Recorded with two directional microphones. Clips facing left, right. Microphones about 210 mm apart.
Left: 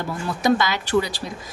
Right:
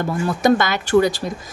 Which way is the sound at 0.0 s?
50° right (ahead or behind).